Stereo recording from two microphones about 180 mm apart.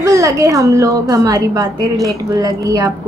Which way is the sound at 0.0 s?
20° right (ahead or behind).